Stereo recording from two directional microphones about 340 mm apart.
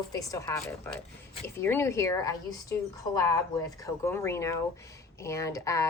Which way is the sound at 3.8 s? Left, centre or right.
Centre.